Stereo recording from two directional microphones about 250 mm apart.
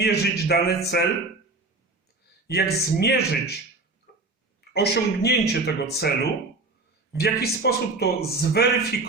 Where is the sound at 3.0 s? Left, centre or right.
Left.